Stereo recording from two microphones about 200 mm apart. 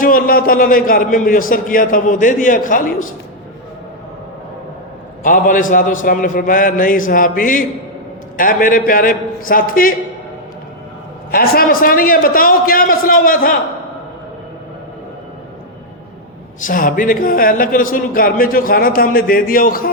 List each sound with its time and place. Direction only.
0.0 s a man's voice: 45° left (ahead or behind)
5.2 s a man's voice: 40° left (ahead or behind)
11.3 s a man's voice: 45° left (ahead or behind)
16.6 s a man's voice: 40° left (ahead or behind)